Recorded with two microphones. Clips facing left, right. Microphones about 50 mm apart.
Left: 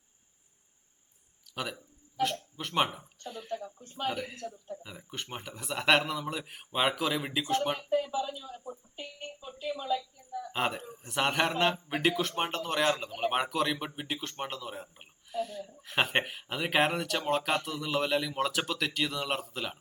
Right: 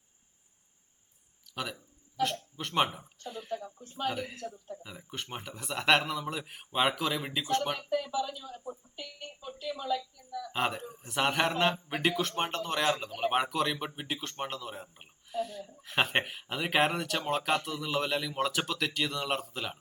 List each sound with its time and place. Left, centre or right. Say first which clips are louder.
2.2 s a man's voice: even; centre
4.4 s a man's voice: even; right
4.8 s a man's voice: even; centre
8.3 s speech: left 1 dB; centre
9.0 s speech: left 2 dB; left
9.4 s speech: left 1 dB; centre
9.8 s a sound: right 1 dB; left
10.5 s a man's voice: even; centre